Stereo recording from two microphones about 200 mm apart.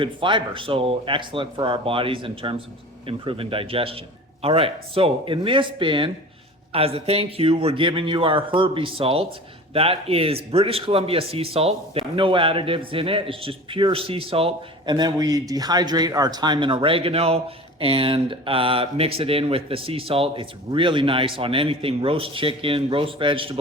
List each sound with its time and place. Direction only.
0.0 s speech: 25° right (ahead or behind)